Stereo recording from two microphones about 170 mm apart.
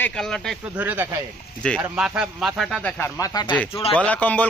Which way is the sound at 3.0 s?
20° left (ahead or behind).